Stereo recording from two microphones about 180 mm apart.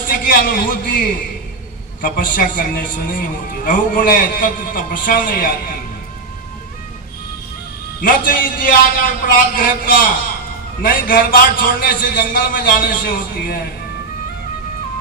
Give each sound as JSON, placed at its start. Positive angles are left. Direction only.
{"t": 0.1, "sound": "a man's voice", "side_deg": 50}
{"t": 8.0, "sound": "a man's voice", "side_deg": 50}